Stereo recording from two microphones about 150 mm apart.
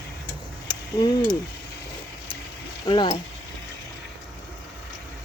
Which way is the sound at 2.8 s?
35° left (ahead or behind).